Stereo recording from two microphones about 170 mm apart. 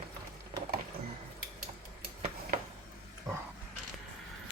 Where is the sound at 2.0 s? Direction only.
60° right (ahead or behind).